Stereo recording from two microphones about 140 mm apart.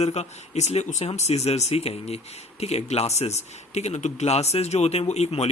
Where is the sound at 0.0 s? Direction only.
50° left (ahead or behind).